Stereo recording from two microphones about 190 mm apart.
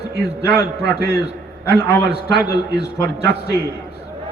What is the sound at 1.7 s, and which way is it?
Speech, 15° left (ahead or behind).